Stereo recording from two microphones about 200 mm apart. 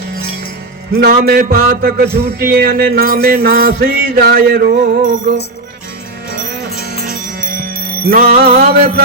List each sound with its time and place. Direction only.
1.0 s music: 50° right (ahead or behind)
7.0 s music: 45° right (ahead or behind)